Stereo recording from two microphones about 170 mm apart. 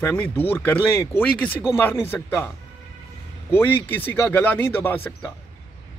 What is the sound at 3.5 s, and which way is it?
Speech, 10° left (ahead or behind).